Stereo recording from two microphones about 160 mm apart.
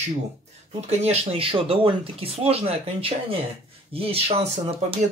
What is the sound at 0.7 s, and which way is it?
Speech, 40° right (ahead or behind).